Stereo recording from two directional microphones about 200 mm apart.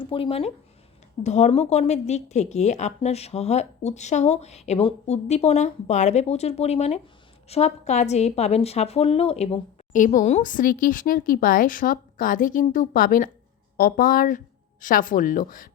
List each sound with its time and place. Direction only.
0.0 s a woman's voice: 25° left (ahead or behind); by 15.7 s 45° left (ahead or behind)